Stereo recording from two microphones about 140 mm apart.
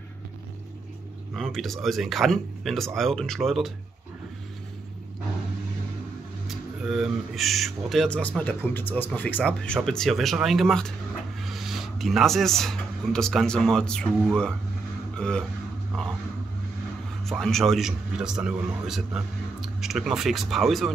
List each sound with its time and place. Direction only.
1.3 s speech: centre (ahead or behind)
6.4 s speech: centre (ahead or behind)
15.1 s a sound: 5° left (ahead or behind)
17.2 s speech: centre (ahead or behind)